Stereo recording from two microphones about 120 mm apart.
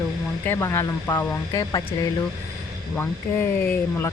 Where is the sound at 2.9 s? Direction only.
15° left (ahead or behind).